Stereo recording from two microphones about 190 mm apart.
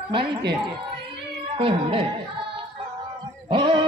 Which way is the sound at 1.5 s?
25° right (ahead or behind).